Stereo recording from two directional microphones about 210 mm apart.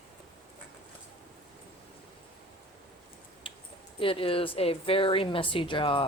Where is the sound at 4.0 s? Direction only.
25° left (ahead or behind).